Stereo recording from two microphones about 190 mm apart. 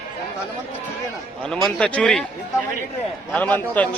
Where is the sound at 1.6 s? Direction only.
5° left (ahead or behind).